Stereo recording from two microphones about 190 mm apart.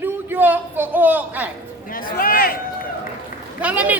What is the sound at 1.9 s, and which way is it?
Speech, 50° left (ahead or behind).